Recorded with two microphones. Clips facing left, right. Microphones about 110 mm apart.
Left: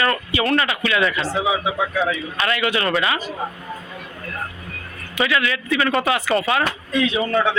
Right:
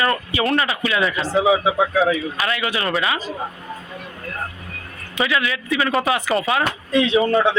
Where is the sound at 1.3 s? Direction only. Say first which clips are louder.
Right 4 dB; 35° right (ahead or behind).